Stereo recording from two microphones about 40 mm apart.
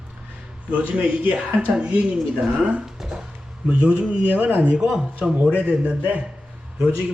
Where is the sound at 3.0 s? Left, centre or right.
Centre.